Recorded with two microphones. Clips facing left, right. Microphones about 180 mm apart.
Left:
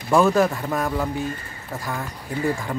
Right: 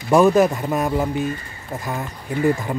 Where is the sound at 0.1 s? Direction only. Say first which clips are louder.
Right 3 dB; 20° right (ahead or behind).